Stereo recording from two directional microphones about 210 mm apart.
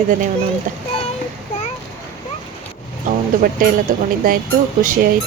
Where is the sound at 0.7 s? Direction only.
40° right (ahead or behind).